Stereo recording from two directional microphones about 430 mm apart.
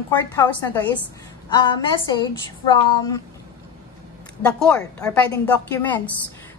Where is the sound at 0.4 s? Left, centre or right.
Centre.